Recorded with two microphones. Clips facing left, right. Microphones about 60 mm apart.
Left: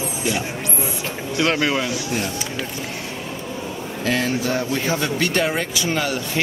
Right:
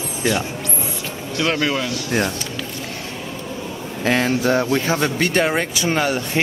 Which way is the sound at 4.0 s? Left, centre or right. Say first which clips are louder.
Right 3 dB; right.